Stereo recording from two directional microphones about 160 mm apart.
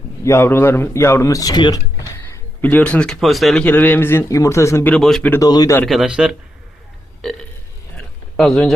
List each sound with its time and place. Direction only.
0.3 s speech: 15° left (ahead or behind)
4.9 s speech: 5° left (ahead or behind)
5.3 s a man's voice: 25° left (ahead or behind)
5.8 s speech: centre (ahead or behind)
7.9 s a sound: centre (ahead or behind)